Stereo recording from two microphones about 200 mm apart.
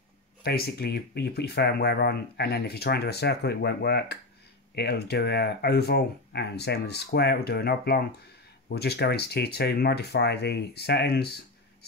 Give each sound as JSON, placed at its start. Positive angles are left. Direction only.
{"t": 0.4, "sound": "speech", "side_deg": 50}